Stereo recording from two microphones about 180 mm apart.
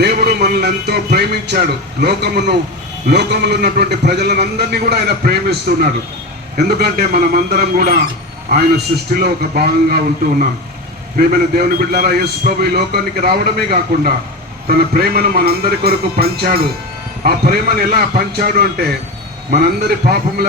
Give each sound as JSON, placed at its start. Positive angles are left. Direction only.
{"t": 0.0, "sound": "a man's voice", "side_deg": -65}
{"t": 11.2, "sound": "a man's voice", "side_deg": -55}